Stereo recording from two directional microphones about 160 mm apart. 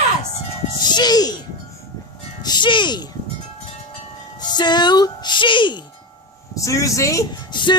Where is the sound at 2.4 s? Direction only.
25° left (ahead or behind).